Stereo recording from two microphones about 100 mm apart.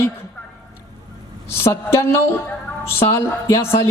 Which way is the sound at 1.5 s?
25° left (ahead or behind).